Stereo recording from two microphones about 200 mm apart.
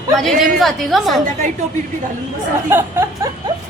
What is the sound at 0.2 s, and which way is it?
A woman's voice, centre (ahead or behind).